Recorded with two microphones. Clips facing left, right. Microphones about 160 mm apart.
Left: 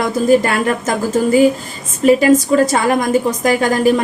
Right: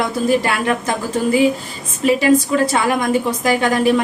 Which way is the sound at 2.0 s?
40° left (ahead or behind).